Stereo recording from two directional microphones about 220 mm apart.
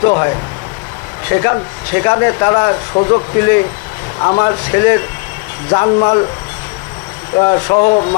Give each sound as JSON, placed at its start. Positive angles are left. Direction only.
{"t": 0.0, "sound": "speech", "side_deg": 25}
{"t": 1.3, "sound": "speech", "side_deg": 15}
{"t": 7.3, "sound": "speech", "side_deg": 25}